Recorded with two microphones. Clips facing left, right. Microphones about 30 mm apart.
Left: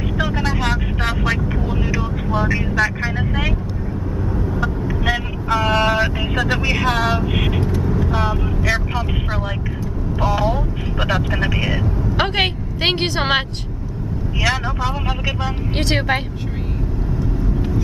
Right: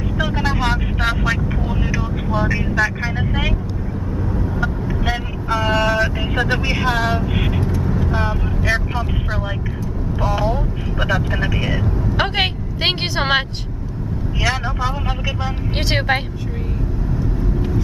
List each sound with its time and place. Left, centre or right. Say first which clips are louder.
0.2 s vehicle: right 1 dB; centre
1.7 s speech: left 1 dB; centre
5.5 s vehicle: left 1 dB; left
6.6 s speech: left 1 dB; centre
7.2 s speech: left 1 dB; centre
7.8 s vehicle: left 1 dB; centre
8.2 s speech: left 1 dB; centre
10.2 s speech: left 1 dB; centre
11.0 s a woman's voice: even; left; by 13.4 s centre
14.4 s speech: left 1 dB; centre